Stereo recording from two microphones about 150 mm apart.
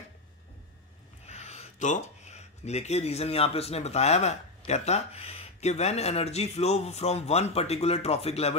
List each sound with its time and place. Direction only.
1.2 s speech: 45° left (ahead or behind)